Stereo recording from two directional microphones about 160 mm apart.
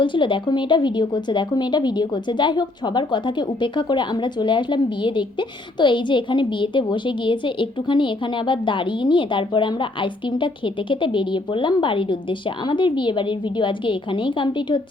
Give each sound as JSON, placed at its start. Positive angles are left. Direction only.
{"t": 0.0, "sound": "speech", "side_deg": 30}